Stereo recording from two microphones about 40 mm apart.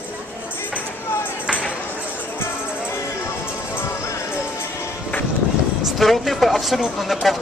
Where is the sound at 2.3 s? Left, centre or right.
Left.